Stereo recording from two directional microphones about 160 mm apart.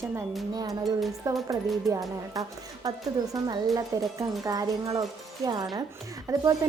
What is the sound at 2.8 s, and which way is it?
A woman's voice, 20° right (ahead or behind).